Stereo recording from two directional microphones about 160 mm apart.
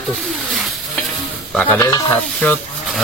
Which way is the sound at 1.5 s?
10° left (ahead or behind).